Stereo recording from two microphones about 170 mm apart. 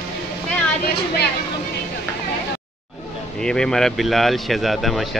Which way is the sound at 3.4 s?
5° left (ahead or behind).